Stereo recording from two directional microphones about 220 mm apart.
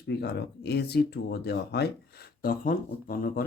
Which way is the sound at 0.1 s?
45° left (ahead or behind).